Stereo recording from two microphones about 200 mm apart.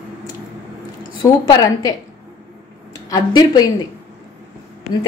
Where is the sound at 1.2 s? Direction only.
20° left (ahead or behind).